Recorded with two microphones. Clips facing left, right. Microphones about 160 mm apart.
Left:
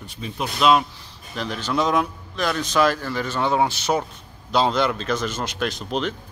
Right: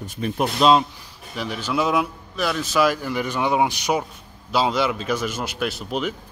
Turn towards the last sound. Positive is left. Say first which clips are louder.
# even
turn(degrees=-10)  # may be behind; listen again after turning